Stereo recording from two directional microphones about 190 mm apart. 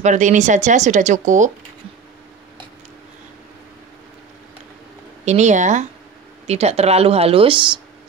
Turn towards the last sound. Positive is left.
turn(degrees=-25)  # may be behind; listen again after turning